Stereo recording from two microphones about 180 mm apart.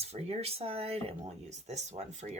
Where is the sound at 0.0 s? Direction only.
35° right (ahead or behind).